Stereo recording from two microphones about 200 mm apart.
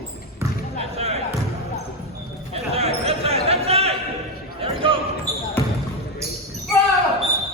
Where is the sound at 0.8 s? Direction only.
30° right (ahead or behind).